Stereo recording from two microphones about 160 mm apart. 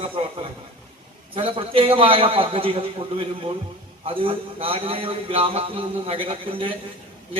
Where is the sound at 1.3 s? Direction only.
35° right (ahead or behind).